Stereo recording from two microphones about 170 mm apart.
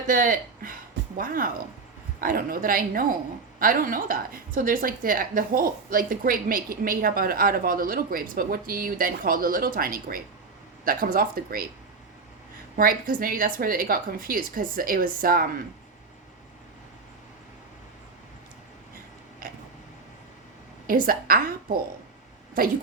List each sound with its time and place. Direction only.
0.1 s a woman's voice: 55° right (ahead or behind)
12.7 s a woman's voice: 55° right (ahead or behind)
20.8 s a woman's voice: 55° right (ahead or behind)